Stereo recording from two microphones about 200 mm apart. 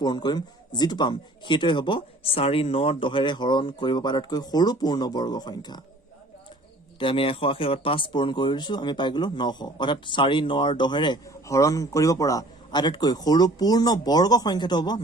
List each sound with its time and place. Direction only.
0.0 s speech: 20° left (ahead or behind)
7.0 s speech: 25° left (ahead or behind)